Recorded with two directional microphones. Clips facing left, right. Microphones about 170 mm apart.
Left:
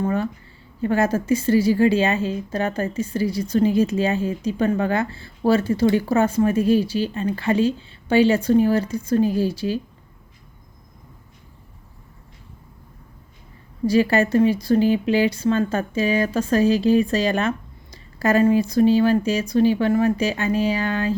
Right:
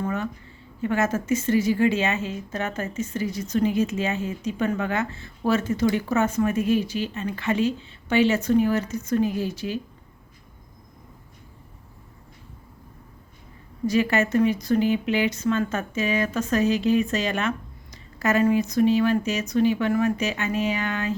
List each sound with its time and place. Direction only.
0.0 s a woman's voice: 35° left (ahead or behind)
13.8 s a woman's voice: 35° left (ahead or behind)